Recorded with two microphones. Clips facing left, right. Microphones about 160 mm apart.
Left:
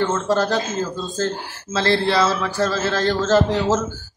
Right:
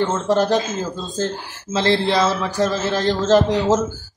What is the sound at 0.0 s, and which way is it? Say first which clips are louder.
Speech: right 1 dB; 15° right (ahead or behind).